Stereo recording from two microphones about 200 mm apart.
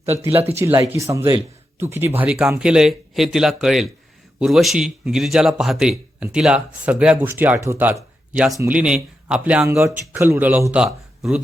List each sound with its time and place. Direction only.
0.0 s speech: 30° right (ahead or behind)
0.4 s speech: 10° right (ahead or behind)